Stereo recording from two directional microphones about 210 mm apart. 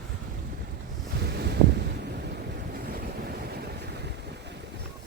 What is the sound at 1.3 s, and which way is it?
Wind noise, 50° right (ahead or behind).